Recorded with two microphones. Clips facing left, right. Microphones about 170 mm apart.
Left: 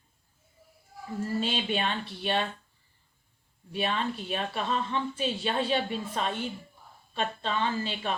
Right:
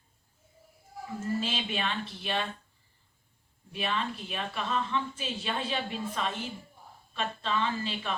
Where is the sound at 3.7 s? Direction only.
35° left (ahead or behind).